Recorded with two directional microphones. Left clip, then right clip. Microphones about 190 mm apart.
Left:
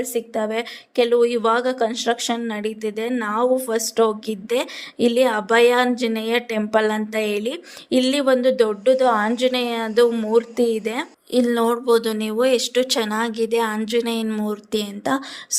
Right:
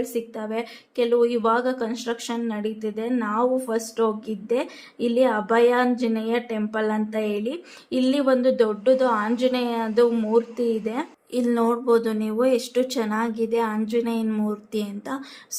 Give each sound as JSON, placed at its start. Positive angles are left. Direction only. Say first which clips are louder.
{"t": 0.0, "sound": "a woman's voice", "louder": "left 5 dB", "side_deg": 25}